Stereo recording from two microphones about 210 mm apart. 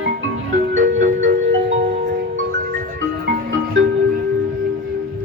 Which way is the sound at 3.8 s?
60° right (ahead or behind).